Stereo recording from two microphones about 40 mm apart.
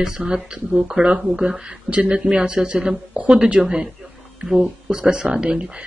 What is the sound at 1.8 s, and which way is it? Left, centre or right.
Speech, right.